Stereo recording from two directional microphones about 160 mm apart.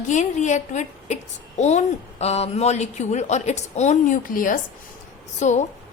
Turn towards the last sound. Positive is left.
turn(degrees=45)  # may be behind; listen again after turning